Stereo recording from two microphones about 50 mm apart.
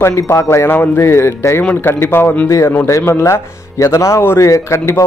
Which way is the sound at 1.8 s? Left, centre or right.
Left.